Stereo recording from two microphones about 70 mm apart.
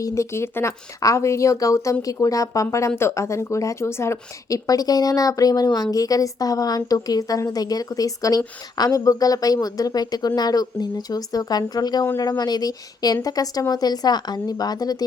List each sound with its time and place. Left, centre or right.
0.0 s a woman's voice: left
2.9 s a woman's voice: left
4.4 s speech: left